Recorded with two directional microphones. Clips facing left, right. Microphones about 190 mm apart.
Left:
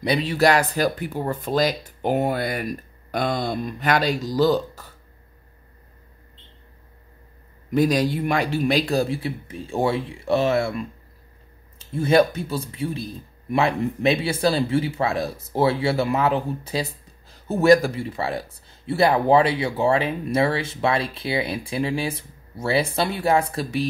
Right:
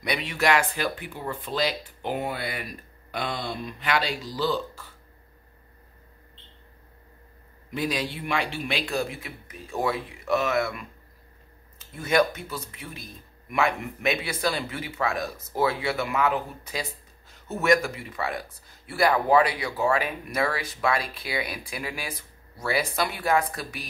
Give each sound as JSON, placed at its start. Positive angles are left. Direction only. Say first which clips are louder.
{"t": 0.0, "sound": "speech", "louder": "left 7 dB", "side_deg": 35}
{"t": 7.7, "sound": "speech", "louder": "left 9 dB", "side_deg": 45}
{"t": 12.0, "sound": "a man's voice", "louder": "left 5 dB", "side_deg": 30}